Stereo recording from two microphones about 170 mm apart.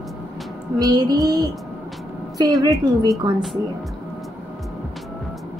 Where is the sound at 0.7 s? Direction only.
20° right (ahead or behind).